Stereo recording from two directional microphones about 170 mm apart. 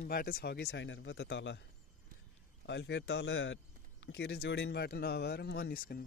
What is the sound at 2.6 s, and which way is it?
Speech, 90° left.